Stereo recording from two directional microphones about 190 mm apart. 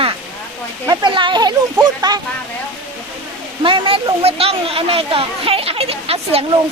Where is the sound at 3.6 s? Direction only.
25° right (ahead or behind).